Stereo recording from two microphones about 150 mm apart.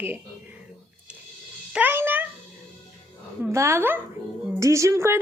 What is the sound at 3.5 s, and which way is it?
A woman's voice, 20° right (ahead or behind).